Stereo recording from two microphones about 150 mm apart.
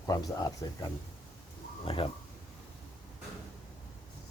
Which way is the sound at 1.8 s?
35° left (ahead or behind).